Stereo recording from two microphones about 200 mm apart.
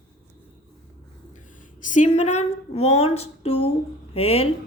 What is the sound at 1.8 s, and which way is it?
Speech, 40° left (ahead or behind).